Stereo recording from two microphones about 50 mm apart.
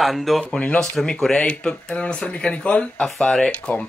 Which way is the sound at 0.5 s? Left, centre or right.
Left.